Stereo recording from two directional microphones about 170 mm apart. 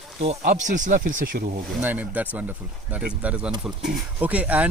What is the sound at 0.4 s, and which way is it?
Speech, 50° right (ahead or behind).